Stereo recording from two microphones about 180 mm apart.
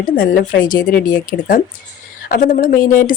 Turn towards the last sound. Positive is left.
turn(degrees=50)  # may be behind; listen again after turning